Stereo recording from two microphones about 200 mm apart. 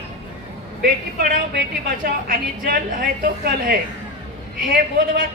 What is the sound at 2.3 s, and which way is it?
A woman's voice, 45° right (ahead or behind).